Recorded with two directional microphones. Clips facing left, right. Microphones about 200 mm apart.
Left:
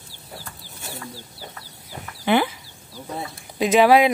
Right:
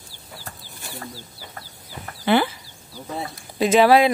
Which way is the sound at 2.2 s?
10° left (ahead or behind).